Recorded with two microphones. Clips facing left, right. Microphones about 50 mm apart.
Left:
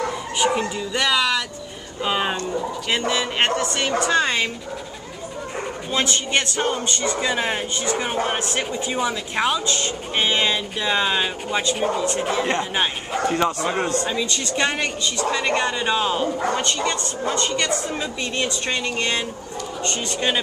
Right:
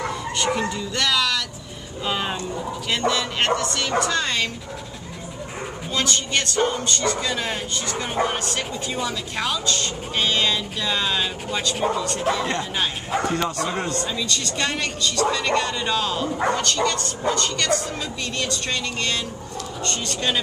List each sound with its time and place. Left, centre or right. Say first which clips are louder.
0.4 s speech: left 3 dB; centre
5.9 s speech: left 1 dB; left